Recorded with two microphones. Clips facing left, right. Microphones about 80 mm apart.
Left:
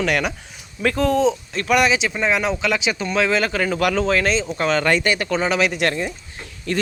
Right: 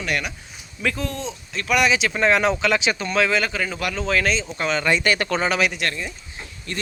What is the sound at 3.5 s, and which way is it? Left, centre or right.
Speech, left.